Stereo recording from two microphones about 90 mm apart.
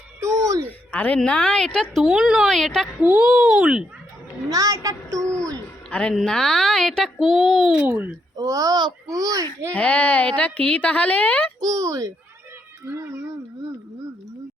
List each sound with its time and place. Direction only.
0.2 s a sound: 35° right (ahead or behind)
0.6 s a woman's voice: 20° left (ahead or behind)
2.0 s speech: 5° right (ahead or behind)
2.5 s speech: 5° left (ahead or behind)
3.0 s a child's voice: 20° right (ahead or behind)
3.2 s speech: 5° right (ahead or behind)
4.4 s a woman's voice: 40° right (ahead or behind)
5.2 s music: 10° left (ahead or behind)
5.9 s a woman's voice: 15° left (ahead or behind)
7.9 s a child's voice: 20° right (ahead or behind)
8.4 s a child's voice: 40° right (ahead or behind)
9.7 s a woman's voice: 15° left (ahead or behind)
11.6 s a child's voice: 40° right (ahead or behind)